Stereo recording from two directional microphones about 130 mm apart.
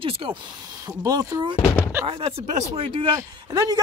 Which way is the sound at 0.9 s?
30° right (ahead or behind).